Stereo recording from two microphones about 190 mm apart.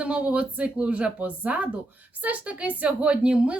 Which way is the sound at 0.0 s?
5° right (ahead or behind).